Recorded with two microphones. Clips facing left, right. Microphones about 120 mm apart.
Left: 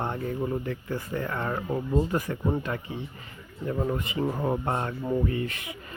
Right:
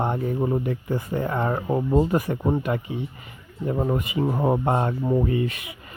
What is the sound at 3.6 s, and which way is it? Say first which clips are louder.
Speech: right 4 dB; 30° right (ahead or behind).